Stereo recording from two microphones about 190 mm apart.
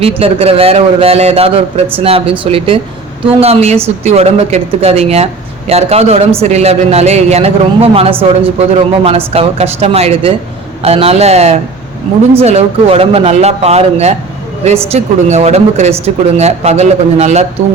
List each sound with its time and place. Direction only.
0.2 s speech: 30° right (ahead or behind)